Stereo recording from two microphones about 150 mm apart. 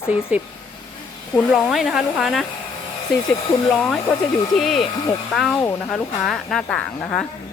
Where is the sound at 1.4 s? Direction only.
Centre (ahead or behind).